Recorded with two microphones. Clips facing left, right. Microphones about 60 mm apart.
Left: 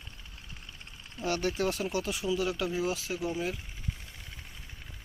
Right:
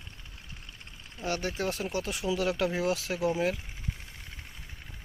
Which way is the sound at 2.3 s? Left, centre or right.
Right.